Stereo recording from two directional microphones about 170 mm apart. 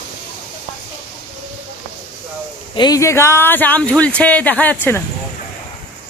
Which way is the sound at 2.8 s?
20° left (ahead or behind).